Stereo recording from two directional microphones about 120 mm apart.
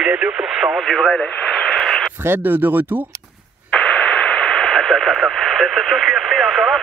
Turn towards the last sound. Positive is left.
turn(degrees=0)  # may be behind; listen again after turning